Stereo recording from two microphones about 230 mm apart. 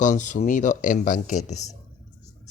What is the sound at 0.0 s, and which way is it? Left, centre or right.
A man's voice, left.